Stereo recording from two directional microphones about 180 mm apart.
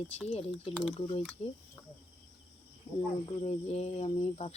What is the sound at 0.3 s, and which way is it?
Speech, 35° left (ahead or behind).